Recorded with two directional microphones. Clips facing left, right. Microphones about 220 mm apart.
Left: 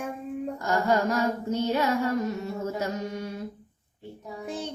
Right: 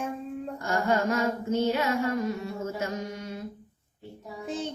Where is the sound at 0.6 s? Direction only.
40° left (ahead or behind).